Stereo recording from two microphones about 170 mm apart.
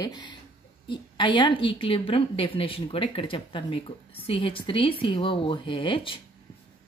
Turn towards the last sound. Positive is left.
turn(degrees=30)  # may be behind; listen again after turning